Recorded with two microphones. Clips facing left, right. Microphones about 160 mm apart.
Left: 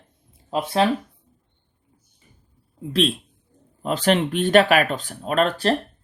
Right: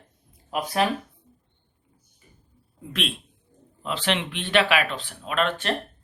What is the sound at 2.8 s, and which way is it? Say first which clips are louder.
Speech: left 9 dB; 35° left (ahead or behind).